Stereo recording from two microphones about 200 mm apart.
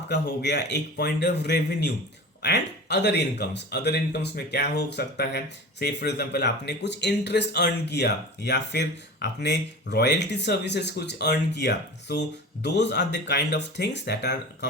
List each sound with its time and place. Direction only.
0.1 s speech: 60° left (ahead or behind)